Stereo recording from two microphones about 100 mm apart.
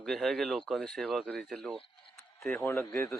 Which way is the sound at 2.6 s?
25° left (ahead or behind).